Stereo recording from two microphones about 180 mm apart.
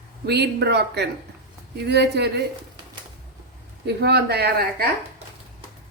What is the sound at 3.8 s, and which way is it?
Speech, 65° right (ahead or behind).